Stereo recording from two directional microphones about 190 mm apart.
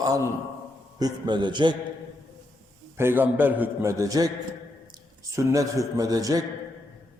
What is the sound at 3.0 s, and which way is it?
Speech, 10° right (ahead or behind).